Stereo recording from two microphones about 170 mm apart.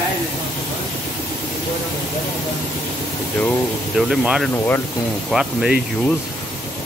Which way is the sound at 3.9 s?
5° right (ahead or behind).